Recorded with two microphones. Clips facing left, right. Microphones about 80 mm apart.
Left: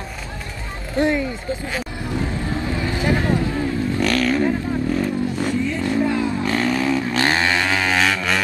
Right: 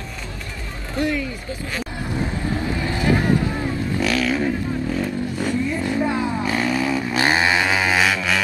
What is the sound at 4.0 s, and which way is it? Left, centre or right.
Vehicle, centre.